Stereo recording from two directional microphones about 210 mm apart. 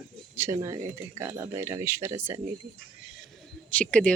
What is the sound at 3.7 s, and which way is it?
Speech, 5° left (ahead or behind).